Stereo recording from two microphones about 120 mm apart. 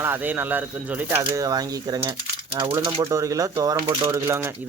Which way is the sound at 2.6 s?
45° right (ahead or behind).